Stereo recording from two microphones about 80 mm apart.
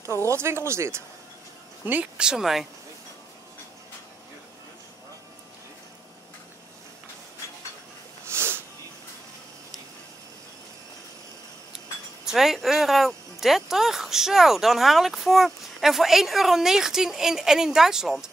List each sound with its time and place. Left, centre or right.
0.3 s speech: right
1.9 s speech: centre
8.3 s snort: right
12.3 s speech: centre